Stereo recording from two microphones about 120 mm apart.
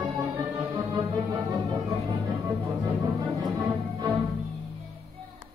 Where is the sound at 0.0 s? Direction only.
30° right (ahead or behind).